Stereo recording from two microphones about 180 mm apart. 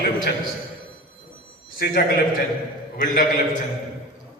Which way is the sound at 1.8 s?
60° left (ahead or behind).